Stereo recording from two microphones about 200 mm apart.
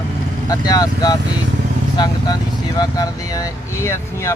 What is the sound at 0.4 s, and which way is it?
Speech, 20° left (ahead or behind).